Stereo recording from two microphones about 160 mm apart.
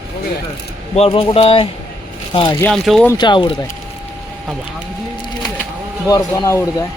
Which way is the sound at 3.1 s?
30° left (ahead or behind).